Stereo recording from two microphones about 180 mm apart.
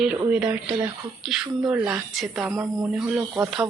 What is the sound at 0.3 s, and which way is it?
Speech, 5° right (ahead or behind).